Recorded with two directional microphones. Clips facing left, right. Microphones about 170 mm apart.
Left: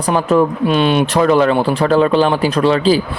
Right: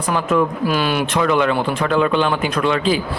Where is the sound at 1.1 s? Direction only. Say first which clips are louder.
Left 4 dB; 35° left (ahead or behind).